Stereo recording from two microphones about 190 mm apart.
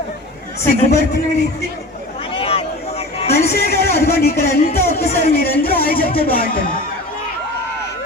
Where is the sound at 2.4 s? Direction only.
30° left (ahead or behind).